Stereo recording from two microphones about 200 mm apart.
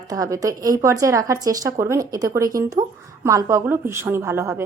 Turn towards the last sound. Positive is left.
turn(degrees=-10)  # may be behind; listen again after turning